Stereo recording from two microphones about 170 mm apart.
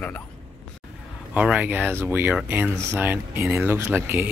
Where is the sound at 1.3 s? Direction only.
10° right (ahead or behind).